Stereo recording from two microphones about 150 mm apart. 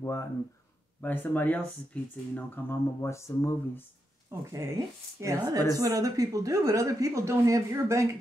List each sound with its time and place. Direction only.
0.0 s speech: 20° left (ahead or behind)
4.5 s speech: 20° right (ahead or behind)